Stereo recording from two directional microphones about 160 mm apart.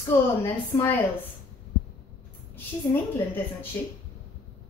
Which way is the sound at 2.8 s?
15° left (ahead or behind).